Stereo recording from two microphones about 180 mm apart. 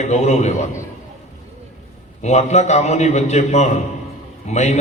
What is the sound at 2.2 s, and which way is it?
A man's voice, 40° left (ahead or behind).